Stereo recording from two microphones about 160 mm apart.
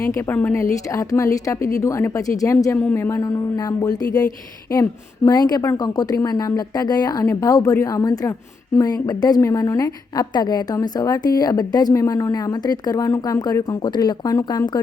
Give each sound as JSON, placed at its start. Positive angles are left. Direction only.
{"t": 0.0, "sound": "a woman's voice", "side_deg": 15}